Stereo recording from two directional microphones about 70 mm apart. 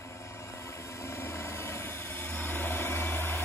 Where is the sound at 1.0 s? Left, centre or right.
Left.